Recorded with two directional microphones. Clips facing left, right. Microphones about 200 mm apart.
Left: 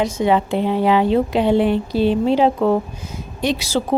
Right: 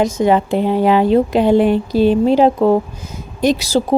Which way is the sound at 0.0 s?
45° right (ahead or behind).